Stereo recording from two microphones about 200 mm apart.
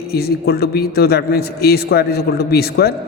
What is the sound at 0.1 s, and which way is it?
A man's voice, 50° left (ahead or behind).